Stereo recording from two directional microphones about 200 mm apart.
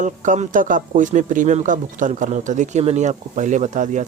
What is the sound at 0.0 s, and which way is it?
Speech, 40° right (ahead or behind).